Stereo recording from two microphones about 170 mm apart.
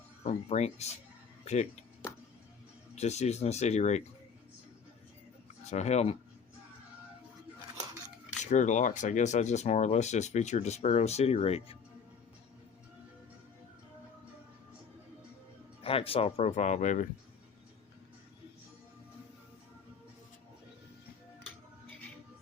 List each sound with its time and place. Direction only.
0.3 s speech: 40° left (ahead or behind)
2.9 s speech: 40° left (ahead or behind)
5.6 s speech: 40° left (ahead or behind)
8.3 s speech: 45° left (ahead or behind)
15.8 s speech: 35° left (ahead or behind)